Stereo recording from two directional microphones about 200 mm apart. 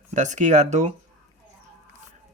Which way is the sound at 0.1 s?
40° right (ahead or behind).